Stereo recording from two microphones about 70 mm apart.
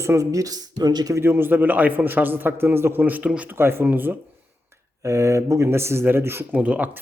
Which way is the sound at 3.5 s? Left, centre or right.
Right.